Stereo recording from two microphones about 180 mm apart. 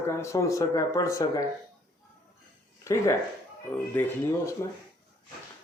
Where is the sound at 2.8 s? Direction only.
15° left (ahead or behind).